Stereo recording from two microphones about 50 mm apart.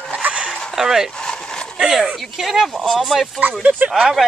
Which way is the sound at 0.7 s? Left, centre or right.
Centre.